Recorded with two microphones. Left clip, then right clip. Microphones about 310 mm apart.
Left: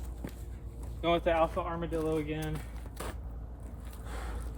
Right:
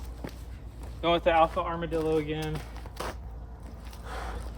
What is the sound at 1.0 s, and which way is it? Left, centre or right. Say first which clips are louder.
Speech: right 5 dB; centre.